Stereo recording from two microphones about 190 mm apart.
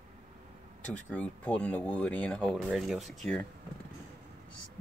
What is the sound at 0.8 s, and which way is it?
Speech, 5° left (ahead or behind).